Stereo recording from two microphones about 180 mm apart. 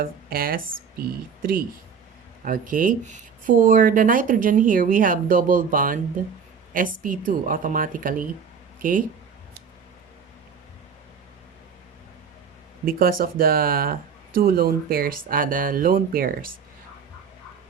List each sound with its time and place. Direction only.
0.0 s speech: 55° right (ahead or behind)
12.8 s speech: 55° right (ahead or behind)